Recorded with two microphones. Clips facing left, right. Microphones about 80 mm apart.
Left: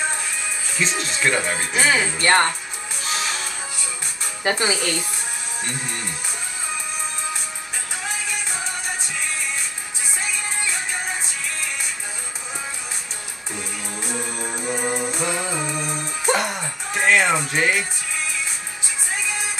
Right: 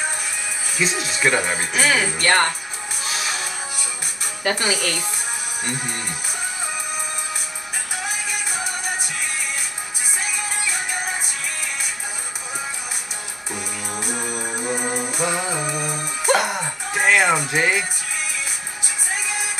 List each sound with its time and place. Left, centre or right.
0.7 s speech: centre
1.7 s speech: left
4.4 s speech: left
13.9 s music: centre